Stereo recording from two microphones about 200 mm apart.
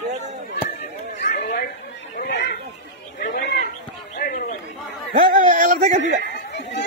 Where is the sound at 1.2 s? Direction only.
55° left (ahead or behind).